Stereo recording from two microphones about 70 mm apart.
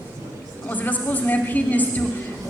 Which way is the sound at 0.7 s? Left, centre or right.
Left.